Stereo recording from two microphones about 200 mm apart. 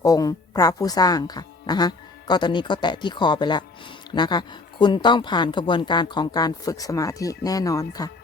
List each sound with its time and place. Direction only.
0.0 s speech: 15° left (ahead or behind)